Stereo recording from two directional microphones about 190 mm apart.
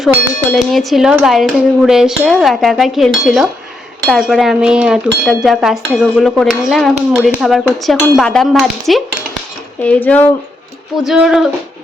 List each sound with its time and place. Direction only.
0.5 s speech: centre (ahead or behind)
11.0 s speech: centre (ahead or behind)